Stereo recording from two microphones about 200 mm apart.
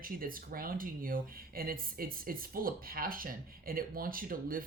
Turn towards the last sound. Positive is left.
turn(degrees=-45)  # may be behind; listen again after turning